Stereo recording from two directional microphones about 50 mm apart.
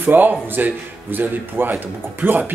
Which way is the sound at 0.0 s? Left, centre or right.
Right.